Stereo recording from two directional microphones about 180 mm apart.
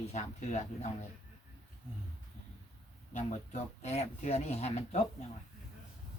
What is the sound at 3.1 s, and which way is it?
Speech, 40° left (ahead or behind).